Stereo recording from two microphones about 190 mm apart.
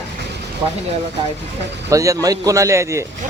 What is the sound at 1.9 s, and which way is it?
A man's voice, 15° right (ahead or behind).